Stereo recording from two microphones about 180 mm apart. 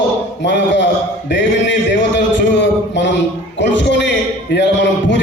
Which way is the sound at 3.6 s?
80° left.